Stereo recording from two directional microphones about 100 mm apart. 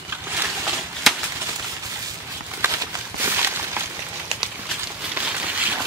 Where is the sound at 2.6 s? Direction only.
20° right (ahead or behind).